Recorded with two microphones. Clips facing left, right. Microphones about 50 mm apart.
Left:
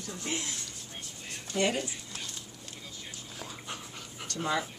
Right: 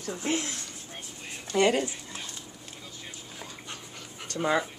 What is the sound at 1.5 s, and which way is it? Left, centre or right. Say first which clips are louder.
Speech: right 6 dB; right.